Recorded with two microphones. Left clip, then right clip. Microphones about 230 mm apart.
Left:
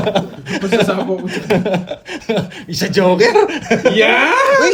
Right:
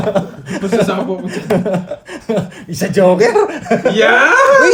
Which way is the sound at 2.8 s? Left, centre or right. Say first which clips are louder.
Right 2 dB; left.